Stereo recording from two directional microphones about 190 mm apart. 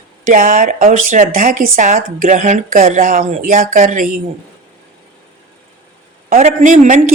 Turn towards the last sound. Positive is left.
turn(degrees=-40)  # may be behind; listen again after turning